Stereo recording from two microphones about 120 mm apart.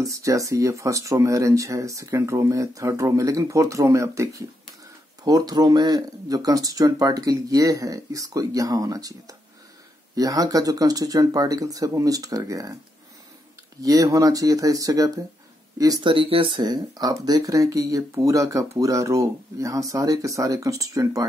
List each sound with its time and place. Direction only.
0.0 s speech: 25° right (ahead or behind)
13.8 s speech: 30° right (ahead or behind)
16.1 s speech: 45° right (ahead or behind); by 21.3 s 30° right (ahead or behind)